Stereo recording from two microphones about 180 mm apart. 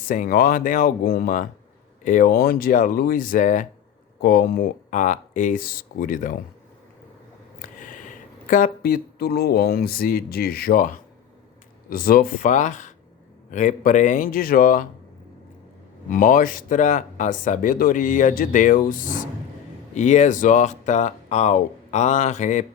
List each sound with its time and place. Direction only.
0.1 s speech: 50° left (ahead or behind)
4.2 s speech: 55° left (ahead or behind)
7.6 s speech: 45° left (ahead or behind)
16.0 s speech: 50° left (ahead or behind)